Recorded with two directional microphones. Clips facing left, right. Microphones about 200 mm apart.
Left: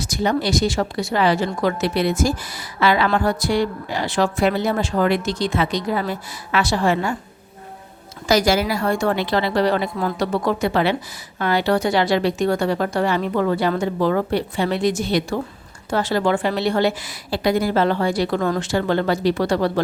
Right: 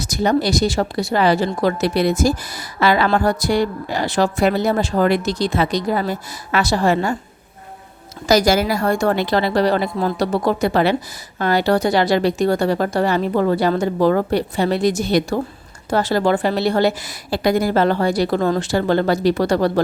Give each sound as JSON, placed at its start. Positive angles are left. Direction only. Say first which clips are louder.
{"t": 0.0, "sound": "a woman's voice", "louder": "right 3 dB", "side_deg": -40}
{"t": 8.3, "sound": "a woman's voice", "louder": "right 2 dB", "side_deg": -40}